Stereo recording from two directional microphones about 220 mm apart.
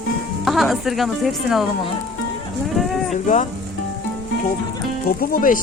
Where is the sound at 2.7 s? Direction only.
Centre (ahead or behind).